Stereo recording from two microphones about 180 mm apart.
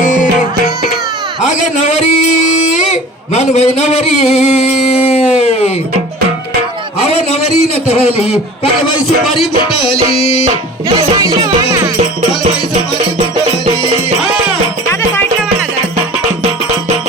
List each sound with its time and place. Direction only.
0.0 s music: 45° left (ahead or behind)
1.4 s a man's voice: 40° left (ahead or behind)
2.7 s a sound: 35° left (ahead or behind)
7.9 s music: 35° left (ahead or behind)
9.8 s music: 30° left (ahead or behind)
10.4 s music: 30° right (ahead or behind)